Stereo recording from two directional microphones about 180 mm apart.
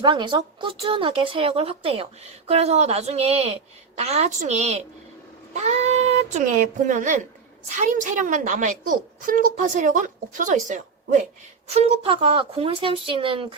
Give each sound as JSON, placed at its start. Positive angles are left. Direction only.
{"t": 0.0, "sound": "a woman's voice", "side_deg": -25}